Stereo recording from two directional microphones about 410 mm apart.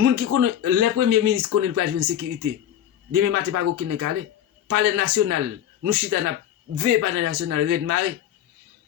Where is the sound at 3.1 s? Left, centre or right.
Right.